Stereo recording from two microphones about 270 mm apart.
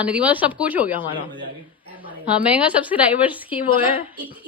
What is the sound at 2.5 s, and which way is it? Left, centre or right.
Speech, centre.